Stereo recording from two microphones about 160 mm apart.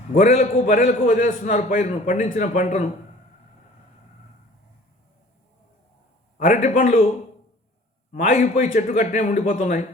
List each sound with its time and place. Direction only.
0.1 s a man's voice: 45° left (ahead or behind)
6.3 s a man's voice: 55° left (ahead or behind)
8.1 s a man's voice: 55° left (ahead or behind)